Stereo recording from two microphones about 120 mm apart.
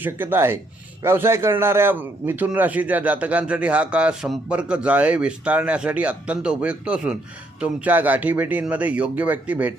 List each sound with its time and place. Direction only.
0.0 s a man's voice: 15° right (ahead or behind)